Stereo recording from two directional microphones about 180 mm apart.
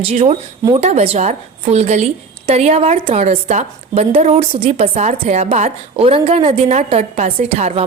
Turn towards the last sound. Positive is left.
turn(degrees=-35)  # may be behind; listen again after turning